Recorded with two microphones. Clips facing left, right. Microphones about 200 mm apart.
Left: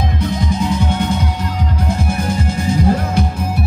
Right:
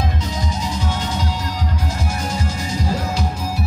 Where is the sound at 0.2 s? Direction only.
55° left (ahead or behind).